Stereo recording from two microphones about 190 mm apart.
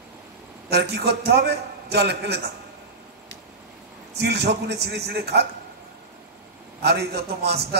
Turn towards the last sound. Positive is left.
turn(degrees=-60)  # may be behind; listen again after turning